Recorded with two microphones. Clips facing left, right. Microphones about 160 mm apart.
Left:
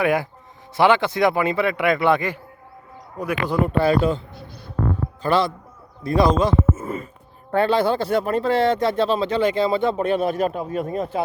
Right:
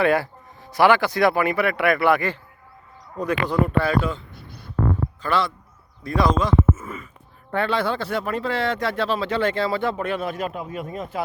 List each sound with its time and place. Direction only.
0.0 s speech: 15° left (ahead or behind)
3.7 s speech: 30° left (ahead or behind)
5.2 s a man's voice: 35° left (ahead or behind)
8.6 s speech: 20° left (ahead or behind)